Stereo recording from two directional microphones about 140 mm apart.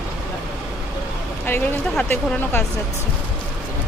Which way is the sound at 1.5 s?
15° left (ahead or behind).